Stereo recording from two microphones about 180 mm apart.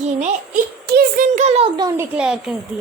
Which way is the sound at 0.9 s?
55° right (ahead or behind).